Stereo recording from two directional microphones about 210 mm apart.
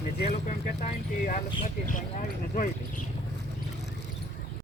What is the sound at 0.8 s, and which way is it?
Speech, 40° left (ahead or behind).